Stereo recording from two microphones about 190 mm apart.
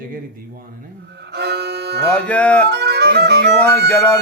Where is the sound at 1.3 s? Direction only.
60° right (ahead or behind).